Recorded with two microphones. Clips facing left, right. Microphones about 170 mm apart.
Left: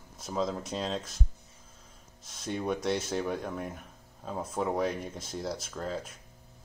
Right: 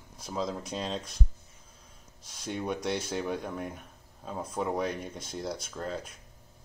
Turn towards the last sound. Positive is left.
turn(degrees=0)  # may be behind; listen again after turning